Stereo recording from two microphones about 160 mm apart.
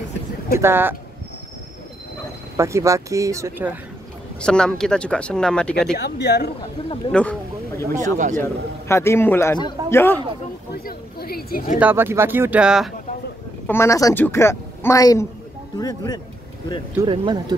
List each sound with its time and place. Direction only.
0.6 s speech: 15° right (ahead or behind)
2.5 s speech: 20° right (ahead or behind)
4.4 s speech: 5° left (ahead or behind)
5.9 s speech: 90° left
7.1 s a man's voice: 5° left (ahead or behind)
8.0 s speech: 50° right (ahead or behind)
8.4 s a man's voice: 15° left (ahead or behind)
10.7 s speech: 70° left (ahead or behind)
11.8 s speech: 15° right (ahead or behind)
13.7 s a man's voice: 15° left (ahead or behind)
17.0 s speech: 30° right (ahead or behind)